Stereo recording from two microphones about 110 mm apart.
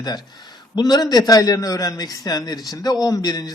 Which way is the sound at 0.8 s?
35° left (ahead or behind).